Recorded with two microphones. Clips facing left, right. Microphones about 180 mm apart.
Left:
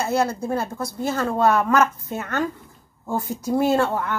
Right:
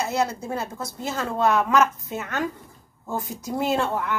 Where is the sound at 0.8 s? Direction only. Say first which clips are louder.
Left 5 dB; centre (ahead or behind).